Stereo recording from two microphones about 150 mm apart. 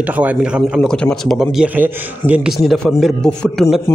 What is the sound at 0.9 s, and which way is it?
A man's voice, 5° left (ahead or behind).